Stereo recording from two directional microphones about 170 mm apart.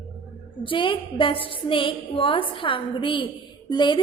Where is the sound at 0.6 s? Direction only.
30° left (ahead or behind).